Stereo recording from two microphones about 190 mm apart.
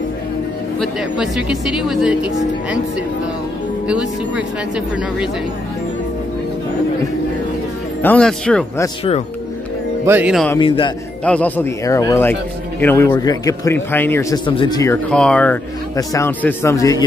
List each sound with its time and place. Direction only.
0.7 s speech: centre (ahead or behind)
3.8 s speech: 5° right (ahead or behind)
8.0 s speech: 5° left (ahead or behind)
10.0 s speech: 10° right (ahead or behind)
11.2 s a man's voice: 10° left (ahead or behind)
14.4 s speech: 25° left (ahead or behind)
15.0 s a man's voice: 5° left (ahead or behind)